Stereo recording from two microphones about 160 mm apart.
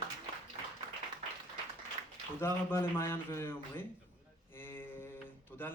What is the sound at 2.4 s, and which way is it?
Speech, 15° left (ahead or behind).